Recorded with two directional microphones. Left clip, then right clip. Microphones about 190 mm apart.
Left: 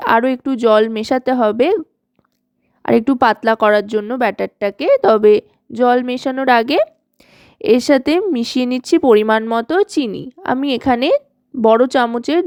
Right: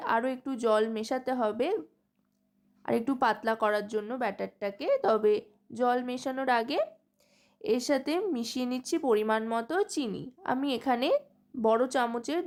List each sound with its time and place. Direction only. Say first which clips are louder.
0.0 s speech: left 15 dB; 40° left (ahead or behind)
2.8 s speech: left 14 dB; 40° left (ahead or behind)